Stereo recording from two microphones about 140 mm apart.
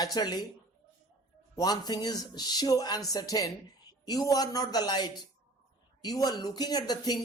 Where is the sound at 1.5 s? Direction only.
30° left (ahead or behind).